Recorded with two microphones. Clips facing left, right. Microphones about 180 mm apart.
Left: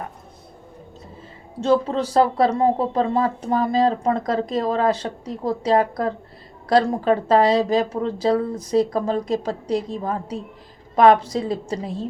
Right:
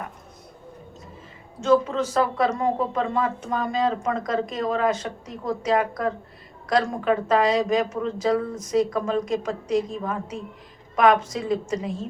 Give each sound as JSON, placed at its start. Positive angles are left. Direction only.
{"t": 1.6, "sound": "speech", "side_deg": 35}